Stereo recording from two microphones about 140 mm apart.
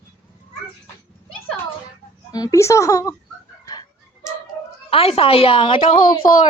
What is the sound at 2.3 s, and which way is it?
Speech, 25° left (ahead or behind).